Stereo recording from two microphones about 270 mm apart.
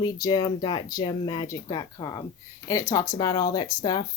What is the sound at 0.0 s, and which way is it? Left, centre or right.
Speech, centre.